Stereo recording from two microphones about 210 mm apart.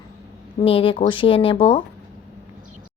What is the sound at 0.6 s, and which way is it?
Speech, 25° left (ahead or behind).